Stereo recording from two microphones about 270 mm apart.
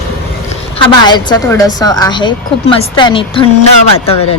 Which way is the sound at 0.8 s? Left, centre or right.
Centre.